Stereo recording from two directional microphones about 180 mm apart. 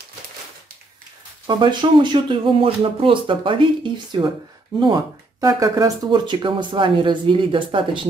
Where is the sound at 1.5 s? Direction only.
25° right (ahead or behind).